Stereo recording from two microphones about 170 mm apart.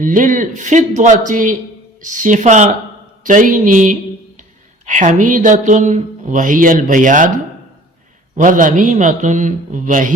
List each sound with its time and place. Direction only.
0.0 s speech: 50° right (ahead or behind)
8.4 s speech: 50° right (ahead or behind)